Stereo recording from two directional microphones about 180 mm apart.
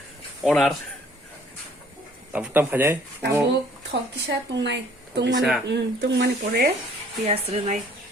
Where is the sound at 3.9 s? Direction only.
70° right (ahead or behind).